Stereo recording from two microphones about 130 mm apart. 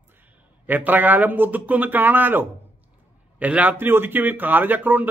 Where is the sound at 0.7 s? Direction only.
15° right (ahead or behind).